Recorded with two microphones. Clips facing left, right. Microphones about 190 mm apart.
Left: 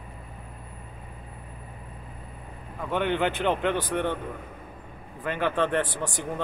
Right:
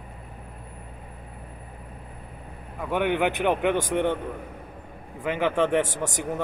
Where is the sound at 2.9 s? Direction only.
15° right (ahead or behind).